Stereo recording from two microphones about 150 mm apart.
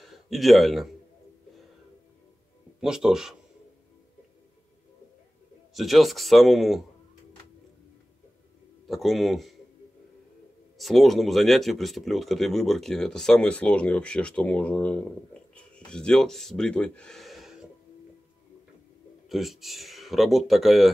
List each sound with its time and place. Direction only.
0.0 s a man's voice: centre (ahead or behind)
2.8 s speech: 5° right (ahead or behind)
5.8 s speech: centre (ahead or behind)
8.8 s speech: centre (ahead or behind)
10.8 s speech: centre (ahead or behind)
19.2 s speech: centre (ahead or behind)